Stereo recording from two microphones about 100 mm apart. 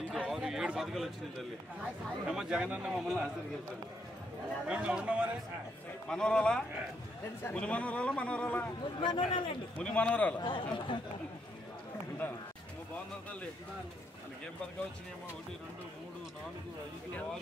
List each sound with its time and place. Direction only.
0.1 s a sound: 5° right (ahead or behind)
2.2 s a man's voice: 10° right (ahead or behind)
4.6 s a man's voice: 10° right (ahead or behind)
6.0 s a man's voice: 10° left (ahead or behind)
9.0 s a man's voice: 55° left (ahead or behind)
9.8 s a man's voice: 15° left (ahead or behind)
10.4 s speech: 55° left (ahead or behind)
12.2 s speech: 20° left (ahead or behind)